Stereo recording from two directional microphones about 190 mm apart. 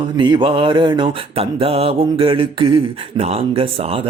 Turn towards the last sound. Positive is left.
turn(degrees=-30)  # may be behind; listen again after turning